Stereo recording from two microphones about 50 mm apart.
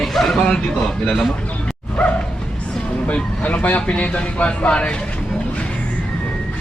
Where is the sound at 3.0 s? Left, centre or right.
Left.